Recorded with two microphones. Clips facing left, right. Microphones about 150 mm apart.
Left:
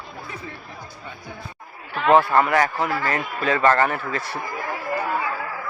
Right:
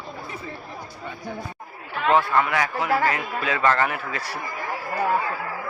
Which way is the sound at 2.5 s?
45° left (ahead or behind).